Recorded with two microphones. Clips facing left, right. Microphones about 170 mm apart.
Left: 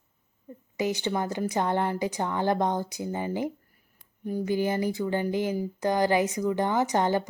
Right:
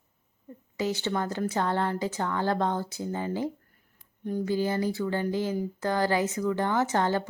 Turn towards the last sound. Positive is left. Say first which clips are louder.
# left 1 dB
turn(degrees=15)  # may be behind; listen again after turning